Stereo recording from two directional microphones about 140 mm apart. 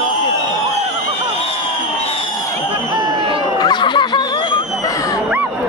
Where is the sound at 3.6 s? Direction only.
30° left (ahead or behind).